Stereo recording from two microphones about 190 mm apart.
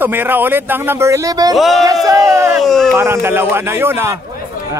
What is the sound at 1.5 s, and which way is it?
Speech, centre (ahead or behind).